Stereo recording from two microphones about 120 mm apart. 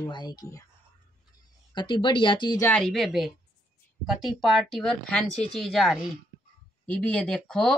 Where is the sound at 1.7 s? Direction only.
40° left (ahead or behind).